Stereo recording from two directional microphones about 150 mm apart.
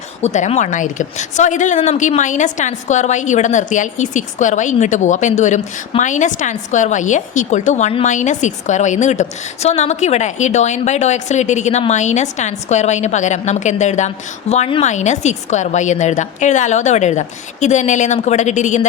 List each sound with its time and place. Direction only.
0.2 s a woman's voice: 50° left (ahead or behind)